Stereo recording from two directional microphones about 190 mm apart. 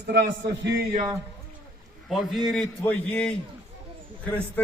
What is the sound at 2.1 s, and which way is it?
A man's voice, centre (ahead or behind).